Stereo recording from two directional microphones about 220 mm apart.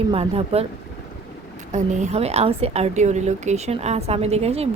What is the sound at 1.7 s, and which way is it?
A woman's voice, 30° right (ahead or behind).